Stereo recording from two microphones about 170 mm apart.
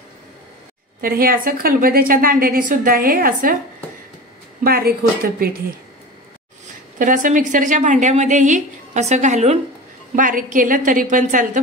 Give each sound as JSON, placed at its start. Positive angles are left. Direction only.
{"t": 1.0, "sound": "a woman's voice", "side_deg": -60}
{"t": 4.6, "sound": "a woman's voice", "side_deg": -60}
{"t": 7.0, "sound": "a woman's voice", "side_deg": -50}